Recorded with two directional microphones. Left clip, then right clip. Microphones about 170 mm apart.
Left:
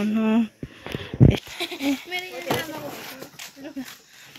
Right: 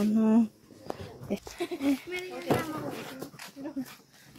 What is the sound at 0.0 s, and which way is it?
Speech, 5° right (ahead or behind).